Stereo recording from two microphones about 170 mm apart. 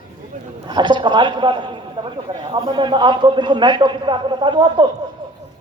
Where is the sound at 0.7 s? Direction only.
25° right (ahead or behind).